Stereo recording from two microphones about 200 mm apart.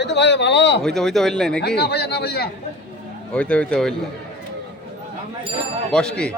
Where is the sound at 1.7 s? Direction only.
55° left (ahead or behind).